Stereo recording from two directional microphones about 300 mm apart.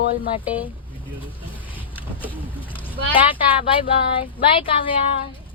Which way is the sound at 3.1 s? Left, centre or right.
Centre.